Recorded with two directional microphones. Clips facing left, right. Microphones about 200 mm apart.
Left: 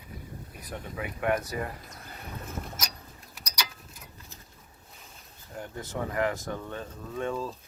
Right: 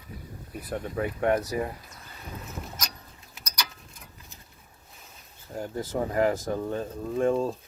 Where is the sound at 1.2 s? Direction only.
30° right (ahead or behind).